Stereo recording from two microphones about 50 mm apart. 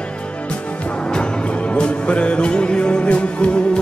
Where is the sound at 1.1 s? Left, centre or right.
Centre.